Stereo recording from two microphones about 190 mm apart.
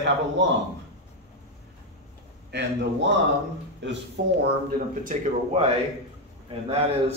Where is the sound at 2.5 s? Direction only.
65° right (ahead or behind).